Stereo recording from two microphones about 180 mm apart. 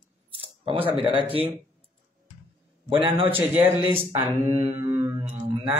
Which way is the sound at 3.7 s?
25° left (ahead or behind).